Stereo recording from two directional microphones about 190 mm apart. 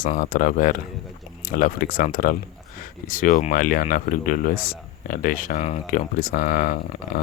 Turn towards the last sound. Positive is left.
turn(degrees=45)  # may be behind; listen again after turning